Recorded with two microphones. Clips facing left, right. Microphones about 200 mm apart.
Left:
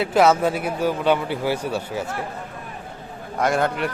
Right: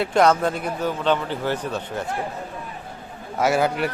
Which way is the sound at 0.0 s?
5° left (ahead or behind).